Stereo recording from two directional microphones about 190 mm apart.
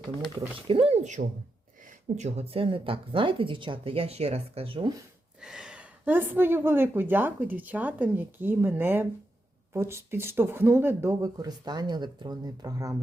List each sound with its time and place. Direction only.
0.3 s a woman's voice: 30° right (ahead or behind)
5.4 s a woman's voice: 5° right (ahead or behind)